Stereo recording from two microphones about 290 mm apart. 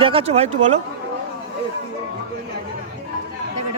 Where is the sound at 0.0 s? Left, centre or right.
Centre.